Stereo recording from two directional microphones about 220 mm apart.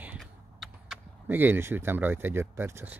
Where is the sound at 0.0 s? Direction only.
5° right (ahead or behind).